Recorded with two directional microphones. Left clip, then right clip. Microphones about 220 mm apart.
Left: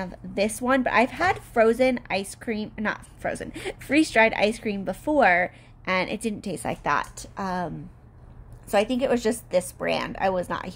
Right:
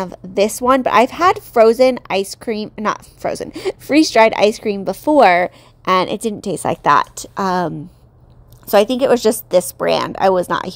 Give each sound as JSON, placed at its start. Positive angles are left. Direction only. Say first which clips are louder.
{"t": 0.0, "sound": "a woman's voice", "louder": "right 10 dB", "side_deg": -30}